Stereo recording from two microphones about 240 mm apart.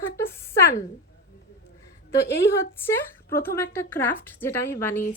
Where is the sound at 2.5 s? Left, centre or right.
Centre.